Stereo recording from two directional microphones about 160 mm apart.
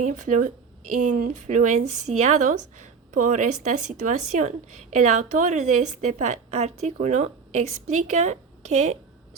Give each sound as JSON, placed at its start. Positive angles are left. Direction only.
{"t": 0.0, "sound": "a woman's voice", "side_deg": -55}